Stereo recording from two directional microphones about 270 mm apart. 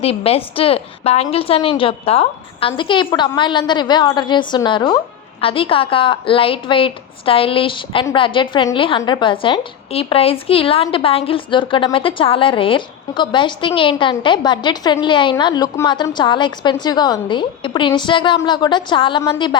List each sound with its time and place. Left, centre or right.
0.0 s a woman's voice: left